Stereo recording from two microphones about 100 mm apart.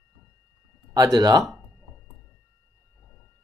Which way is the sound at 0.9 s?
40° right (ahead or behind).